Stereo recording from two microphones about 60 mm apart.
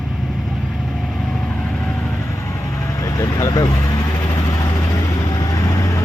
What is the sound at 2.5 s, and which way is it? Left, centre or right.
Vehicle, left.